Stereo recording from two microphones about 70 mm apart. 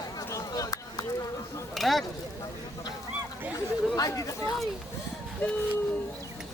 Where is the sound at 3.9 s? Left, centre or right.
Left.